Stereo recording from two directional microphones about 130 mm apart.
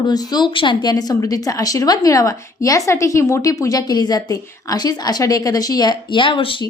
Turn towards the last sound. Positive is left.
turn(degrees=40)  # may be behind; listen again after turning